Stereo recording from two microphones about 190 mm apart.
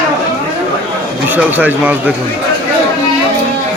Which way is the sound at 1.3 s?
10° right (ahead or behind).